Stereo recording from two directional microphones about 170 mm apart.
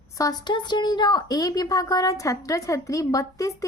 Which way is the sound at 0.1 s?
20° left (ahead or behind).